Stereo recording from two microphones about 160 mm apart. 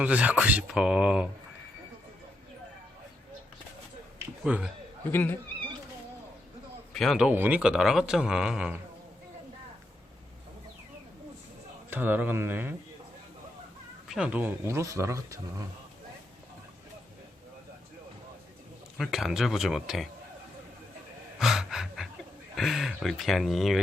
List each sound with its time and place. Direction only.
0.0 s speech: 10° right (ahead or behind)
4.4 s speech: 5° right (ahead or behind)
5.1 s speech: 10° left (ahead or behind)
6.9 s speech: centre (ahead or behind)
11.9 s speech: 10° right (ahead or behind)
14.1 s speech: 5° right (ahead or behind)
18.9 s speech: centre (ahead or behind)
21.3 s gasp: 5° right (ahead or behind)
22.5 s speech: centre (ahead or behind)